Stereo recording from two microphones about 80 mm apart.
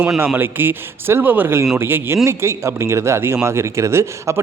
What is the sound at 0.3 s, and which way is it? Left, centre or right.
A man's voice, right.